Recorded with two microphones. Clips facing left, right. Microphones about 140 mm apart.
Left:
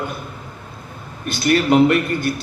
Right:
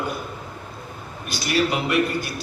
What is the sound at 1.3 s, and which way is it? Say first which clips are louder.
A man's voice: left 7 dB; 55° left (ahead or behind).